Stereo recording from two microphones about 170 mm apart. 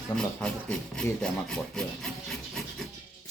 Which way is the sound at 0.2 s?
5° left (ahead or behind).